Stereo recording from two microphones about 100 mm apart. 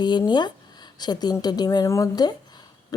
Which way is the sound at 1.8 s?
30° left (ahead or behind).